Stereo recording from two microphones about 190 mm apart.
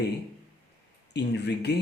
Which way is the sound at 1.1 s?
60° left (ahead or behind).